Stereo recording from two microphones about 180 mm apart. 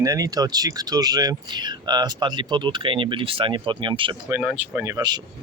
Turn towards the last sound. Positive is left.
turn(degrees=-20)  # may be behind; listen again after turning